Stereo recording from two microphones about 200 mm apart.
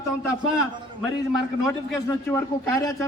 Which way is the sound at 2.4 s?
15° left (ahead or behind).